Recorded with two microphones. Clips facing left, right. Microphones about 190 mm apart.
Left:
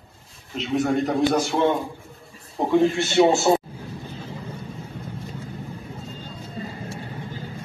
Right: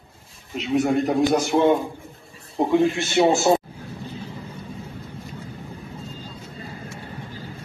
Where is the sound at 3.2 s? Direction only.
20° right (ahead or behind).